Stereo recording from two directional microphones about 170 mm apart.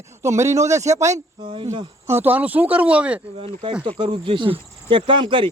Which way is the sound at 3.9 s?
35° right (ahead or behind).